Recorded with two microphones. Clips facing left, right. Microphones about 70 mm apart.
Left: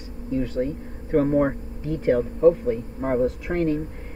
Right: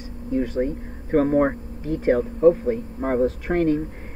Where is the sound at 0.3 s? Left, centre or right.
Right.